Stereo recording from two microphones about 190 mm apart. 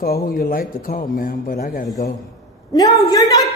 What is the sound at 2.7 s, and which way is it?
Speech, 20° left (ahead or behind).